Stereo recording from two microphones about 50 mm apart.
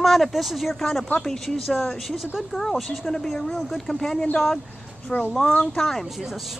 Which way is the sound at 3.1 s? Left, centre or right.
Centre.